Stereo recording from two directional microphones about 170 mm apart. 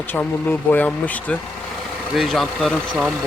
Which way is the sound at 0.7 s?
10° left (ahead or behind).